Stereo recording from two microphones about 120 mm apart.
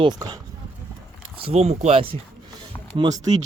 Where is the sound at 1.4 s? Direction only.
60° right (ahead or behind).